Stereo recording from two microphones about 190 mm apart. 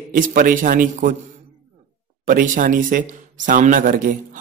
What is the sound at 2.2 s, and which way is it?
Speech, 45° right (ahead or behind).